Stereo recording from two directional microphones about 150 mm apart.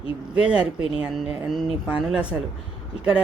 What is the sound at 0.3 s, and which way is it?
Speech, 5° right (ahead or behind).